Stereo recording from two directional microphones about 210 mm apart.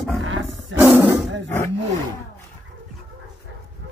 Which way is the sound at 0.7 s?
10° right (ahead or behind).